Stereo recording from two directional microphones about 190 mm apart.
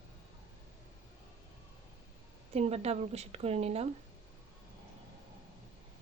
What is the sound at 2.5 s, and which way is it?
Speech, 35° right (ahead or behind).